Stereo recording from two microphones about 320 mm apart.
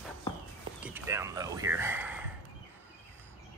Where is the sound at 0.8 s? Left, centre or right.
Centre.